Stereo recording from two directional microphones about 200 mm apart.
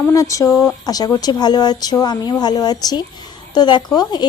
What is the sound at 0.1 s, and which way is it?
A woman's voice, 15° left (ahead or behind).